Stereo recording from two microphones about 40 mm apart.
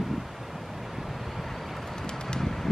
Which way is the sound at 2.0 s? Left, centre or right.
Centre.